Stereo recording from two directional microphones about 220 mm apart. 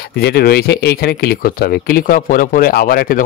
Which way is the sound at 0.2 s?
45° left (ahead or behind).